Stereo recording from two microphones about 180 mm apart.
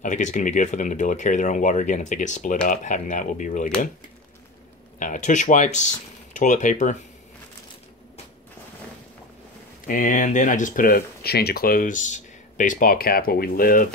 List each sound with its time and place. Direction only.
0.0 s speech: 45° left (ahead or behind)
4.9 s speech: 45° left (ahead or behind)
9.8 s speech: 45° left (ahead or behind)